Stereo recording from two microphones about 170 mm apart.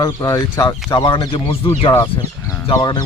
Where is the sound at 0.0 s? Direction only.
20° left (ahead or behind).